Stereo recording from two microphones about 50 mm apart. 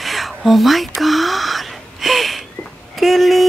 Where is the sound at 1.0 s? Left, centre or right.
Centre.